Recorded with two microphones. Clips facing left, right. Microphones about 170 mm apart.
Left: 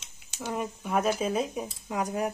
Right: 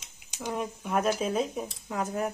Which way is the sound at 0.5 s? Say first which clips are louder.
Left 1 dB; centre (ahead or behind).